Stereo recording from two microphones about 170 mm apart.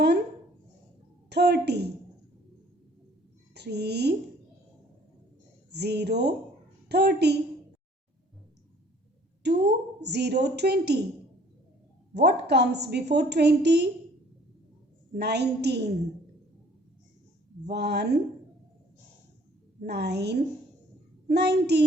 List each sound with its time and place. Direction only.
1.3 s a woman's voice: 75° right (ahead or behind)
3.5 s speech: 75° right (ahead or behind)
5.7 s a woman's voice: 75° right (ahead or behind)
9.4 s a woman's voice: 80° right
12.1 s a woman's voice: 80° right
15.2 s a woman's voice: 75° right (ahead or behind)
17.7 s a woman's voice: 80° right
19.8 s a woman's voice: 75° right (ahead or behind)